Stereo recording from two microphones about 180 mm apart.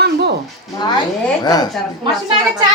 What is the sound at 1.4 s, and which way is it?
Speech, 20° left (ahead or behind).